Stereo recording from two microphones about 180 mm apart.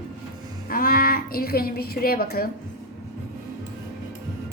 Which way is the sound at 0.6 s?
55° left (ahead or behind).